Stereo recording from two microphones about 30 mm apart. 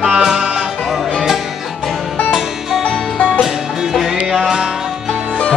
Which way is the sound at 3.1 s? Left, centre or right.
Left.